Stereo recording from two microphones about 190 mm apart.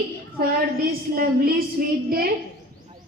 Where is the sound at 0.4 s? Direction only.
50° right (ahead or behind).